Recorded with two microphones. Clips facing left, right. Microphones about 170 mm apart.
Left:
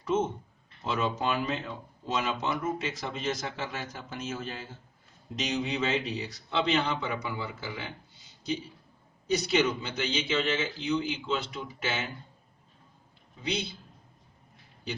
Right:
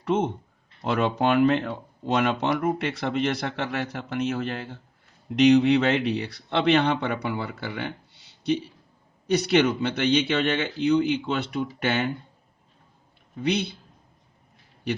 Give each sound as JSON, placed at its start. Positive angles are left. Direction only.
{"t": 0.0, "sound": "speech", "side_deg": -65}
{"t": 13.4, "sound": "speech", "side_deg": -60}